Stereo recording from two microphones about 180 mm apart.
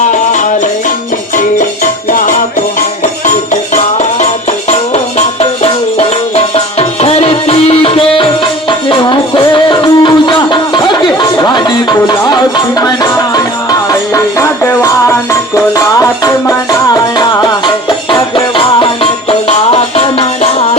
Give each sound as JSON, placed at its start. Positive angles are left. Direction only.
{"t": 0.1, "sound": "music", "side_deg": 45}